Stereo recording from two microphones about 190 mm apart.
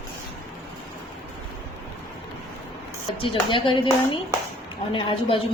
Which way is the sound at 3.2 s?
25° left (ahead or behind).